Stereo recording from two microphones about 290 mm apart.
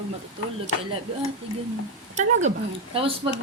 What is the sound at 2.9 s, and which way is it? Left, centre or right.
Speech, centre.